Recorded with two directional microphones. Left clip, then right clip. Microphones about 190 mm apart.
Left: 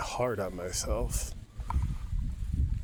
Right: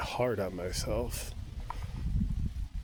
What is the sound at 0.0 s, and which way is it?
Speech, 10° right (ahead or behind).